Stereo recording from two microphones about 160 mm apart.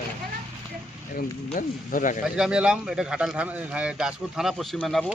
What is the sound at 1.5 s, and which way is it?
Speech, 55° left (ahead or behind).